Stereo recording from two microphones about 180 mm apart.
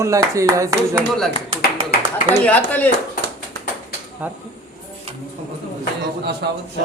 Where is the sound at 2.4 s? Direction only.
10° left (ahead or behind).